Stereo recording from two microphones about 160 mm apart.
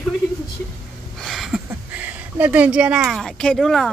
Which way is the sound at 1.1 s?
Centre (ahead or behind).